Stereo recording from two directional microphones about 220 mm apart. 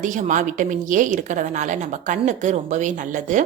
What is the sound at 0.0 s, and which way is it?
A woman's voice, 35° right (ahead or behind).